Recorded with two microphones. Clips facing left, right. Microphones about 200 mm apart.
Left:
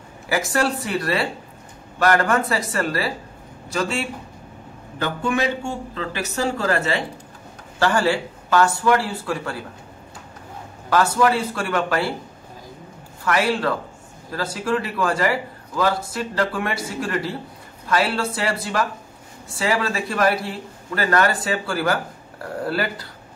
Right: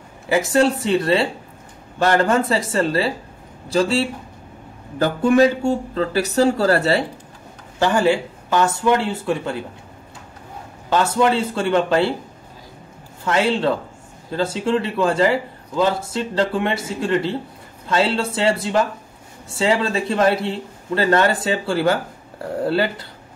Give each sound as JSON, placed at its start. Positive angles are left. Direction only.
{"t": 0.3, "sound": "a man's voice", "side_deg": -25}
{"t": 7.8, "sound": "a man's voice", "side_deg": -20}
{"t": 10.9, "sound": "a man's voice", "side_deg": -25}
{"t": 13.2, "sound": "a man's voice", "side_deg": -25}